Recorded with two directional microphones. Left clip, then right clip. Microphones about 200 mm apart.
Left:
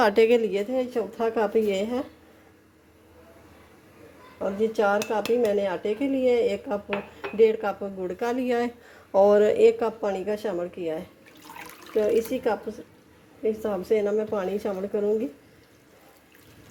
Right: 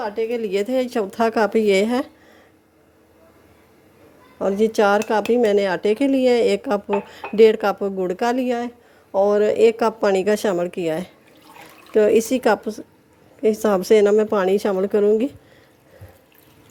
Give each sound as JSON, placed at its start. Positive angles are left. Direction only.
{"t": 0.0, "sound": "speech", "side_deg": 30}
{"t": 0.5, "sound": "a woman's voice", "side_deg": -30}
{"t": 4.4, "sound": "a woman's voice", "side_deg": -45}
{"t": 8.4, "sound": "a woman's voice", "side_deg": -15}